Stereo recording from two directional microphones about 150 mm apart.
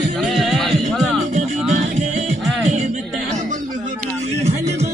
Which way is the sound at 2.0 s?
50° right (ahead or behind).